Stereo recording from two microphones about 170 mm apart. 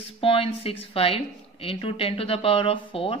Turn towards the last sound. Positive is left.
turn(degrees=35)  # may be behind; listen again after turning